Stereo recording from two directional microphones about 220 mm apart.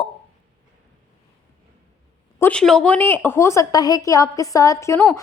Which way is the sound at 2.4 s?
5° left (ahead or behind).